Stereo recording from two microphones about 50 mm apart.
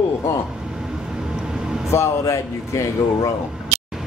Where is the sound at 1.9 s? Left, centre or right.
Left.